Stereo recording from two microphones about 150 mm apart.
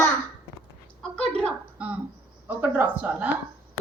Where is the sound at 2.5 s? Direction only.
10° right (ahead or behind).